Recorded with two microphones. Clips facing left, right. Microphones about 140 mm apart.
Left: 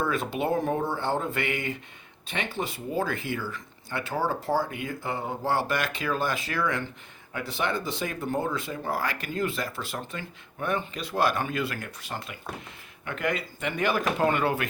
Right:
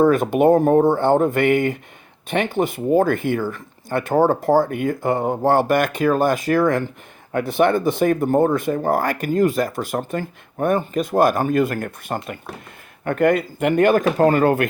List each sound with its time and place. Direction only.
0.0 s speech: 50° right (ahead or behind)